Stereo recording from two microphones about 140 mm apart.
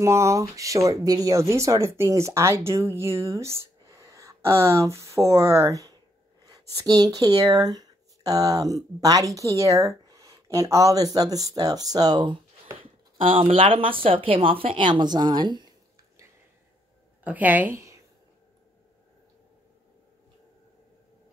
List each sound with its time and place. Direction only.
0.0 s speech: 20° right (ahead or behind)
13.2 s speech: 40° right (ahead or behind)
17.2 s a woman's voice: 10° right (ahead or behind)